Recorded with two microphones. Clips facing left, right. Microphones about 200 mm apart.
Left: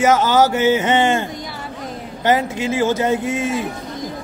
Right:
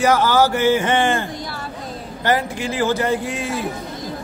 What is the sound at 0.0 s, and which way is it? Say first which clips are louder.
A man's voice: left 1 dB; 20° left (ahead or behind).